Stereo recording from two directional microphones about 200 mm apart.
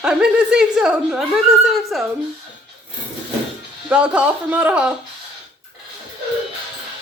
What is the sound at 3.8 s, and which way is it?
A woman's voice, 5° right (ahead or behind).